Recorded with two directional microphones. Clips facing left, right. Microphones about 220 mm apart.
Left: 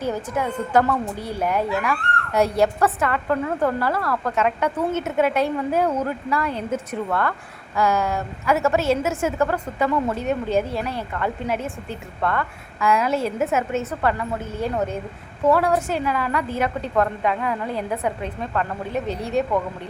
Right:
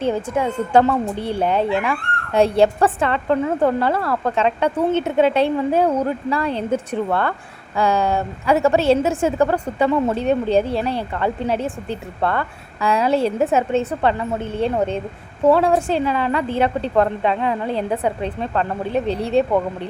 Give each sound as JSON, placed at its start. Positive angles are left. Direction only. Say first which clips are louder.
{"t": 0.0, "sound": "a woman's voice", "louder": "right 4 dB", "side_deg": -25}